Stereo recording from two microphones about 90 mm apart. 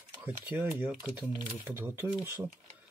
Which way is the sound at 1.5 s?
25° right (ahead or behind).